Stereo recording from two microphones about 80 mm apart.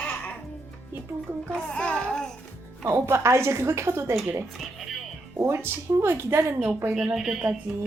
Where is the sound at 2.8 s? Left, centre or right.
Right.